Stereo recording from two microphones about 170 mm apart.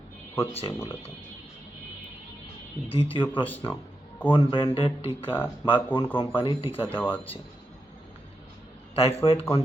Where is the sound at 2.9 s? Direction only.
30° left (ahead or behind).